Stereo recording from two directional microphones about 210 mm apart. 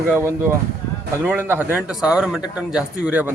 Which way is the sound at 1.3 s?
10° right (ahead or behind).